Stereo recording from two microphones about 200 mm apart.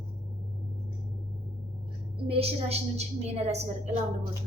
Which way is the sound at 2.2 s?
30° right (ahead or behind).